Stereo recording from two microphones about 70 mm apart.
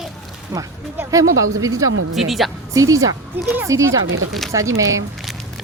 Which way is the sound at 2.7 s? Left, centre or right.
Right.